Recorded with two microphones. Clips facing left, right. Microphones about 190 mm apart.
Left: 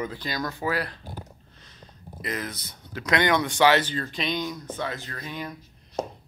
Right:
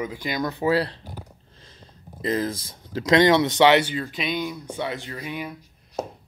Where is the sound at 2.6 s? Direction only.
30° right (ahead or behind).